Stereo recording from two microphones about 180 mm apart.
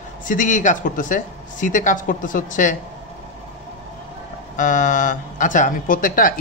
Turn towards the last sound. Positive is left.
turn(degrees=50)  # may be behind; listen again after turning